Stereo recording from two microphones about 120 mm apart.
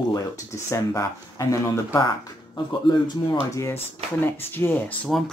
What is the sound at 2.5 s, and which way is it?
Speech, 40° left (ahead or behind).